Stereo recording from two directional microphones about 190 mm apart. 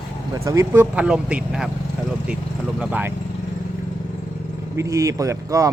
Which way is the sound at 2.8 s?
10° right (ahead or behind).